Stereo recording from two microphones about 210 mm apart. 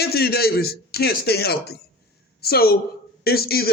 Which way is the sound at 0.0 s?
50° left (ahead or behind).